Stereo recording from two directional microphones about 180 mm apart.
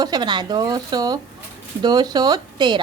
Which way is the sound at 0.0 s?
25° right (ahead or behind).